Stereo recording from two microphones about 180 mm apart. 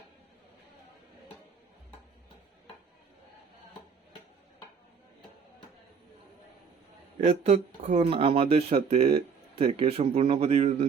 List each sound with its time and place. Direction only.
7.2 s speech: 35° right (ahead or behind)